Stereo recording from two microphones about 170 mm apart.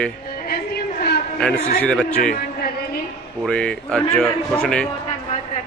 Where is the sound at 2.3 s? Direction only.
65° left (ahead or behind).